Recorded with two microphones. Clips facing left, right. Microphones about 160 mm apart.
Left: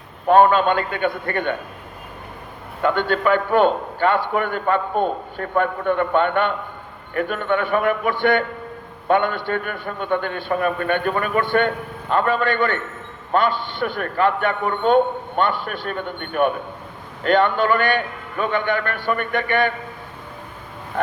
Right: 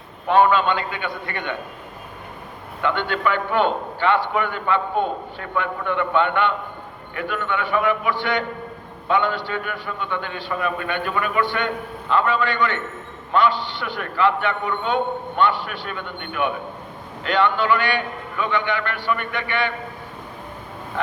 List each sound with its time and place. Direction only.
0.3 s a man's voice: 45° left (ahead or behind)
2.8 s a man's voice: 45° left (ahead or behind)